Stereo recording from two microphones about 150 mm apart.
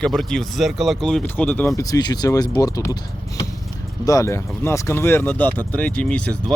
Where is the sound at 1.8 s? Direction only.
25° left (ahead or behind).